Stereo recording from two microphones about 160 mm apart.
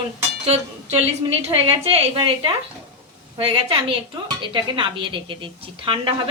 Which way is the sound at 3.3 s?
35° right (ahead or behind).